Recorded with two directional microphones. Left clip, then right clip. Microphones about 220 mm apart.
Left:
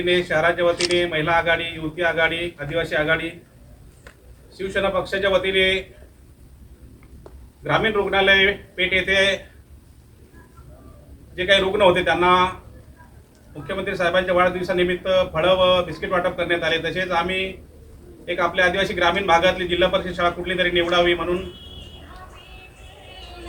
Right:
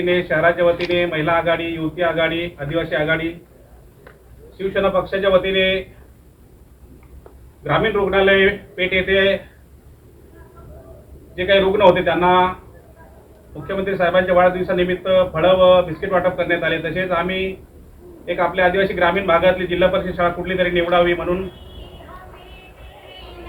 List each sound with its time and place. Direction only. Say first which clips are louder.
0.0 s a man's voice: right 3 dB; centre (ahead or behind)
4.5 s a man's voice: right 4 dB; 20° left (ahead or behind)
7.6 s speech: right 2 dB; 15° left (ahead or behind)
11.3 s speech: right 2 dB; 10° left (ahead or behind)
13.8 s a man's voice: right 4 dB; 10° left (ahead or behind)